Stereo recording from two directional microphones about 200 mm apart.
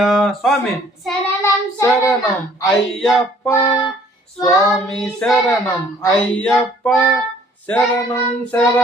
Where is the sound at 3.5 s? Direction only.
15° left (ahead or behind).